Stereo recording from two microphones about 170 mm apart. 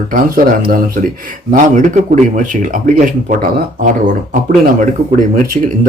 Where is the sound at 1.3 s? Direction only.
50° right (ahead or behind).